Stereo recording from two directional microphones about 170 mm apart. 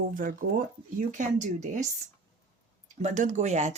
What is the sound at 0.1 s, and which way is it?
Speech, 55° right (ahead or behind).